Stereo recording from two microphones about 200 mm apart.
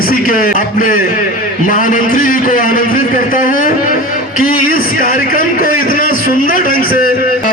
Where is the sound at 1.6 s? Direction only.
45° left (ahead or behind).